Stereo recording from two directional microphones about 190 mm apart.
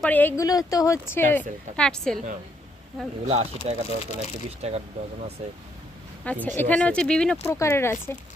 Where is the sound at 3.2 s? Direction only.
35° right (ahead or behind).